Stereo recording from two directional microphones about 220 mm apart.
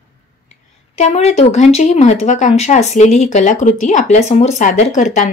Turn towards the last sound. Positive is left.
turn(degrees=35)  # may be behind; listen again after turning